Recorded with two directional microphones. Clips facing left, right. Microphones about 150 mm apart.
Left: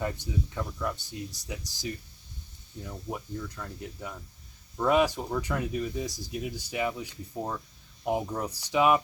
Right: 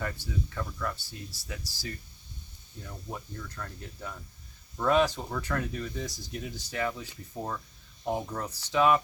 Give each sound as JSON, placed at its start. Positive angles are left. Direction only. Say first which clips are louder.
{"t": 0.0, "sound": "speech", "louder": "left 3 dB", "side_deg": 20}